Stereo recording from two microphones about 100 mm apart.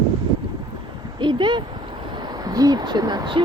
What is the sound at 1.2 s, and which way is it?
Speech, 50° right (ahead or behind).